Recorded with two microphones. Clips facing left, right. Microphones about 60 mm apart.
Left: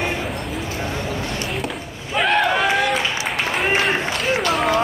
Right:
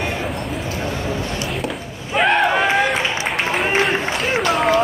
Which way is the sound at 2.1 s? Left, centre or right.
Centre.